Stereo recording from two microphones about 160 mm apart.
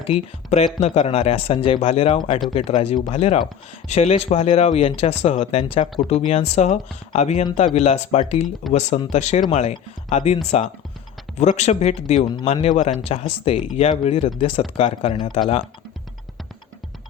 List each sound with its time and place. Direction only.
0.1 s speech: 40° left (ahead or behind)